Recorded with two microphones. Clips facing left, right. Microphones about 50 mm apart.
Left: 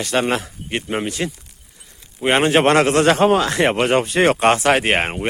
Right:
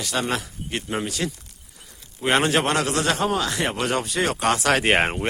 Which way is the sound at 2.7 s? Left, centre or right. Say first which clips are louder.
Left 8 dB; left.